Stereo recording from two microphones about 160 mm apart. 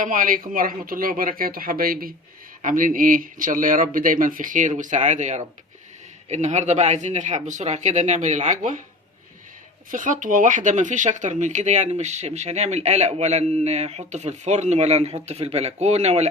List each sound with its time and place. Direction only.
0.0 s speech: 55° right (ahead or behind)
9.9 s speech: 55° right (ahead or behind)